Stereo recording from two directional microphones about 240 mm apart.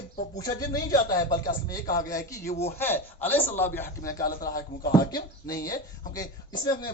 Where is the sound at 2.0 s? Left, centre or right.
Centre.